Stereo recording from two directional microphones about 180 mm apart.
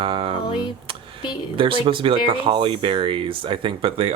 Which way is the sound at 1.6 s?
30° right (ahead or behind).